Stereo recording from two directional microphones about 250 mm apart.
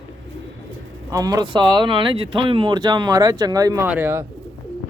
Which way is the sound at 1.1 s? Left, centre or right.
Centre.